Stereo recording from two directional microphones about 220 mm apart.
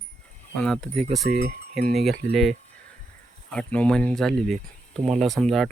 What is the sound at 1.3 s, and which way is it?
Speech, 45° right (ahead or behind).